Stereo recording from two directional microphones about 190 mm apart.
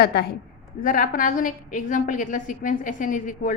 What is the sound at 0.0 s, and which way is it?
Speech, 60° left (ahead or behind).